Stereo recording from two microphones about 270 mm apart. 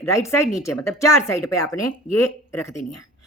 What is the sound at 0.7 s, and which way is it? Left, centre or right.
Speech, left.